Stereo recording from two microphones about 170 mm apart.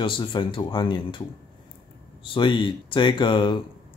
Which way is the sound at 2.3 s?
30° left (ahead or behind).